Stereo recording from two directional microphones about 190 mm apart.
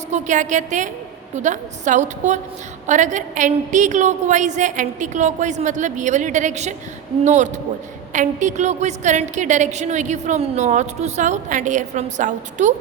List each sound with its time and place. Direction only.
0.1 s a woman's voice: 40° right (ahead or behind)